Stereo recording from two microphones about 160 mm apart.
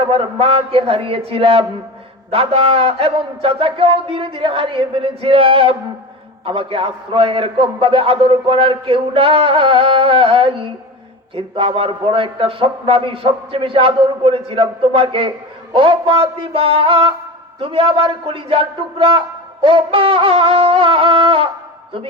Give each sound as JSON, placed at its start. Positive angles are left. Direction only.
{"t": 0.1, "sound": "a man's voice", "side_deg": -35}